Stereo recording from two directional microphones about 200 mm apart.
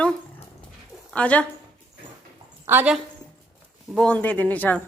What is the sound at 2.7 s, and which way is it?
Speech, 10° right (ahead or behind).